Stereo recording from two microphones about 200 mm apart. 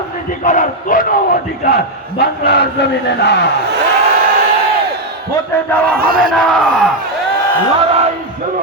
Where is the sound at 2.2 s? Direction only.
55° left (ahead or behind).